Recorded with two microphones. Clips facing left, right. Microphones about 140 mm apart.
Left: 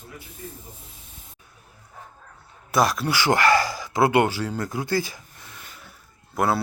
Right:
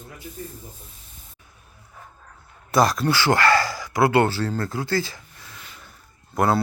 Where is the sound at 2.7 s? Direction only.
Centre (ahead or behind).